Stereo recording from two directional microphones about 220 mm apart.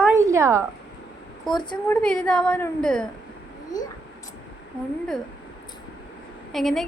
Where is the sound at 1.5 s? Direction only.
Centre (ahead or behind).